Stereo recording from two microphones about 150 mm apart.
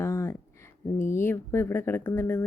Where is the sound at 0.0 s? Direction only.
15° left (ahead or behind).